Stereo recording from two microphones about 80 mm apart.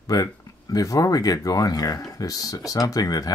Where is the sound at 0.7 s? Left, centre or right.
Left.